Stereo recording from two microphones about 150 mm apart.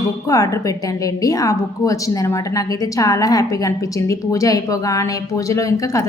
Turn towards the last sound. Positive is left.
turn(degrees=20)  # may be behind; listen again after turning